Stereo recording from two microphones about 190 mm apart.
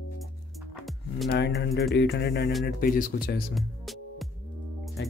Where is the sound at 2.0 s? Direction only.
60° left (ahead or behind).